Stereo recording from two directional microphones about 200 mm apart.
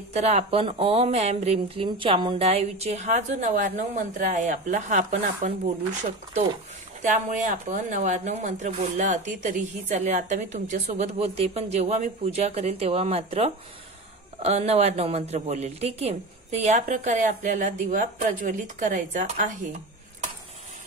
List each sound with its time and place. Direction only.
0.1 s speech: 35° right (ahead or behind)
7.0 s speech: 40° right (ahead or behind)